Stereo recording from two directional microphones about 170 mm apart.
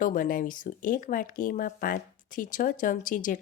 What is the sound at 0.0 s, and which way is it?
Speech, 55° left (ahead or behind).